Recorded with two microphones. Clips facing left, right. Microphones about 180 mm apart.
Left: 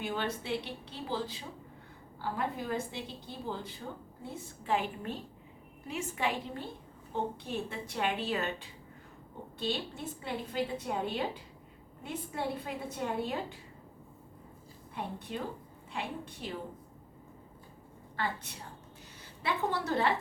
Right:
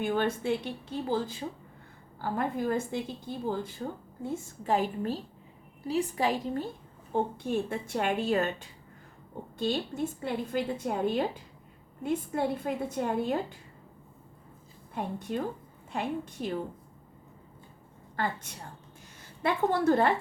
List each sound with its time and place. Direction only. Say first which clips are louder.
0.0 s a woman's voice: right 7 dB; 50° right (ahead or behind)
14.9 s speech: right 6 dB; 45° right (ahead or behind)
18.2 s speech: right 4 dB; 45° right (ahead or behind)
19.4 s speech: right 6 dB; 50° right (ahead or behind)